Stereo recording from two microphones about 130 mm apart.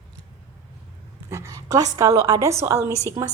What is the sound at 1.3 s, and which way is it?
A woman's voice, 25° right (ahead or behind).